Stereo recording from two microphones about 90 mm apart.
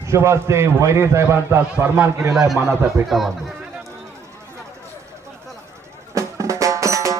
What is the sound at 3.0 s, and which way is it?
Speech, 30° right (ahead or behind).